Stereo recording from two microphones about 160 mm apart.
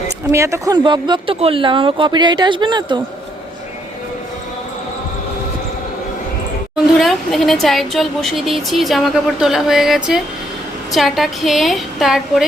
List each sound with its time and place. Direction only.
0.3 s speech: 20° right (ahead or behind)
6.7 s speech: centre (ahead or behind)